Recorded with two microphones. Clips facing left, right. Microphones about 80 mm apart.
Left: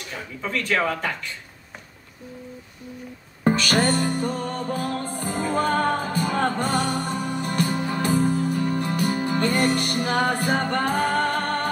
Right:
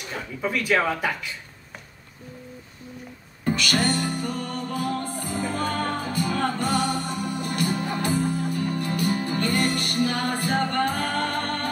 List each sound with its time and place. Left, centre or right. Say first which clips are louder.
0.4 s speech: right 1 dB; centre
3.4 s music: left 3 dB; left